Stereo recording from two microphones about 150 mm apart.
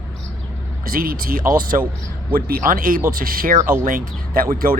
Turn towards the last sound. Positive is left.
turn(degrees=-75)  # may be behind; listen again after turning